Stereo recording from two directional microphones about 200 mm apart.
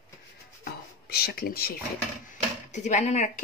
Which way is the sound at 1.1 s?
50° left (ahead or behind).